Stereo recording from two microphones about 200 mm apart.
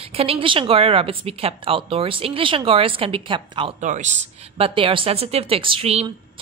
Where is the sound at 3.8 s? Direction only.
35° right (ahead or behind).